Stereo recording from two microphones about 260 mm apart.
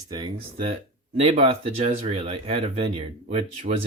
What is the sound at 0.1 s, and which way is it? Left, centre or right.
Speech, centre.